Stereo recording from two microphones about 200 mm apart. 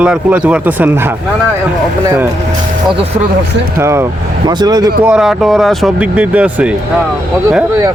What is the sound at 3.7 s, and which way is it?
Speech, 15° right (ahead or behind).